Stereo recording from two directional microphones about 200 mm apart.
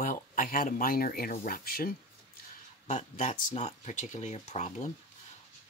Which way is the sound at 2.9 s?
35° left (ahead or behind).